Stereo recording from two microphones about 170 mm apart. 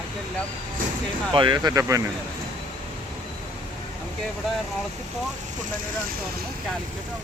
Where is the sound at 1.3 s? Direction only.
25° right (ahead or behind).